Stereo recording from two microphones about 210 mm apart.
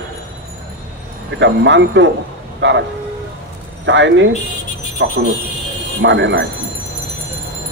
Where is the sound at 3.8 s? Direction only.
60° right (ahead or behind).